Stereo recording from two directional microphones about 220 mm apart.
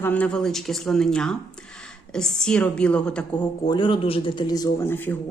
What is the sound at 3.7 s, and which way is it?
Speech, 20° left (ahead or behind).